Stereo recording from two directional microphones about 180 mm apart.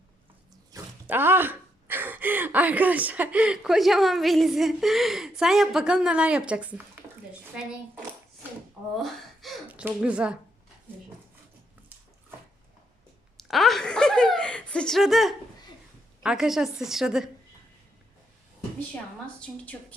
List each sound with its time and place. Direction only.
0.7 s a woman's voice: 10° right (ahead or behind)
9.0 s speech: centre (ahead or behind)
13.3 s chuckle: centre (ahead or behind)
16.2 s a woman's voice: 5° right (ahead or behind)
19.5 s a woman's voice: 5° left (ahead or behind)